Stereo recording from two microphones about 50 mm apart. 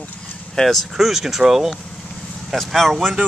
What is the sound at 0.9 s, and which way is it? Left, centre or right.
Speech, centre.